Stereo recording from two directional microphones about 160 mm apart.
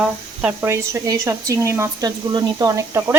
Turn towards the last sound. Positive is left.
turn(degrees=-20)  # may be behind; listen again after turning